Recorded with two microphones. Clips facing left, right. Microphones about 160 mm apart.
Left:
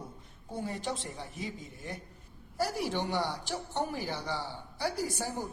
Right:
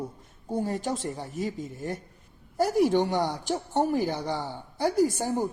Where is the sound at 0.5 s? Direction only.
45° right (ahead or behind).